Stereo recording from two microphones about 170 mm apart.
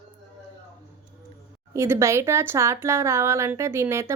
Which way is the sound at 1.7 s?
15° right (ahead or behind).